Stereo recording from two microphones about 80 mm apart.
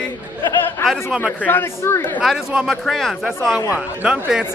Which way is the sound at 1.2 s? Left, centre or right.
Left.